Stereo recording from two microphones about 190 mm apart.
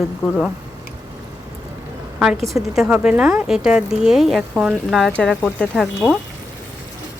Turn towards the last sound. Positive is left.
turn(degrees=0)  # may be behind; listen again after turning